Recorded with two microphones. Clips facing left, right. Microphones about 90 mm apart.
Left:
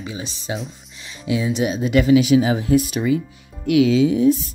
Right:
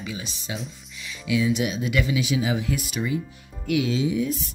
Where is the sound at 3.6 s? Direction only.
90° left.